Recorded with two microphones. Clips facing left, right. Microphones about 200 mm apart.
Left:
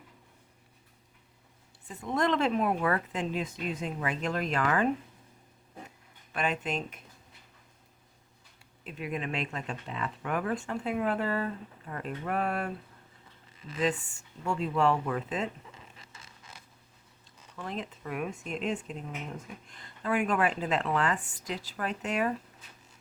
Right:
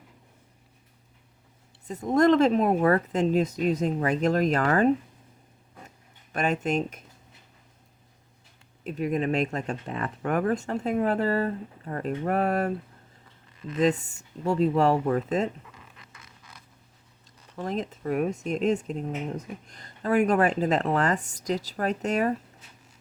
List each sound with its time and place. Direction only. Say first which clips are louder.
1.9 s speech: right 9 dB; 40° right (ahead or behind)
6.3 s speech: right 6 dB; 45° right (ahead or behind)
8.8 s speech: right 9 dB; 40° right (ahead or behind)
15.7 s a sound: right 1 dB; 25° left (ahead or behind)
17.6 s speech: right 7 dB; 40° right (ahead or behind)